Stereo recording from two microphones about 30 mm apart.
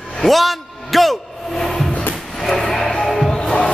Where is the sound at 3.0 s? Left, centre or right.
Centre.